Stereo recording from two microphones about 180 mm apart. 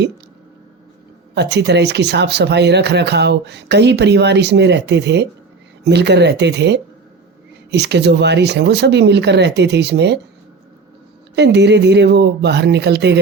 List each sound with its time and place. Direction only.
1.4 s speech: 70° right (ahead or behind)
11.3 s speech: 70° right (ahead or behind)